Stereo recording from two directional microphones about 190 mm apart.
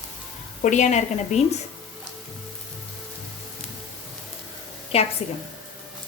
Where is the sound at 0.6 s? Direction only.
40° left (ahead or behind).